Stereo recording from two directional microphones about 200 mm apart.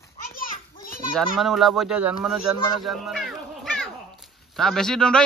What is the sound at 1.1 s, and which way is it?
Speech, centre (ahead or behind).